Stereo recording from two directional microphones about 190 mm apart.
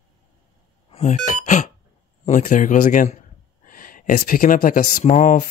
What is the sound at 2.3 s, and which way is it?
Speech, 40° left (ahead or behind).